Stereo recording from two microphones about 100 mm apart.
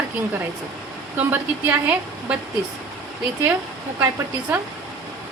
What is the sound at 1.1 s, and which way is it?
A woman's voice, 15° right (ahead or behind).